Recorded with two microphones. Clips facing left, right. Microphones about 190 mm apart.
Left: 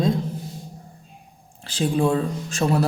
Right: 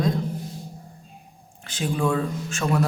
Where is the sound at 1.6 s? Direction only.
35° left (ahead or behind).